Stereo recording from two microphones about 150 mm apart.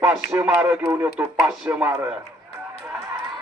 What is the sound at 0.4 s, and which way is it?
A man's voice, 5° right (ahead or behind).